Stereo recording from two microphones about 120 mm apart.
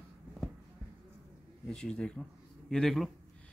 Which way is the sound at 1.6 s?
5° left (ahead or behind).